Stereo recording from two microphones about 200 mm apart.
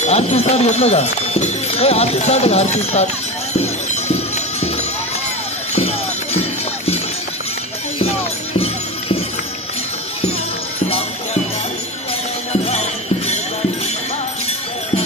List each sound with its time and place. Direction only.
0.0 s speech: 35° left (ahead or behind)
8.5 s music: 30° left (ahead or behind)